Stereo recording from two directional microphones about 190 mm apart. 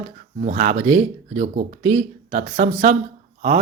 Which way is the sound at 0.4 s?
40° right (ahead or behind).